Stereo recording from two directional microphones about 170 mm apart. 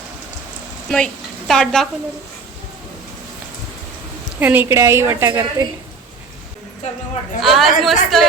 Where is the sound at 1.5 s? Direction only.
5° left (ahead or behind).